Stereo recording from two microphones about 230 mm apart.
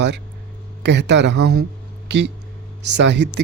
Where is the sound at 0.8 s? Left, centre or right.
Right.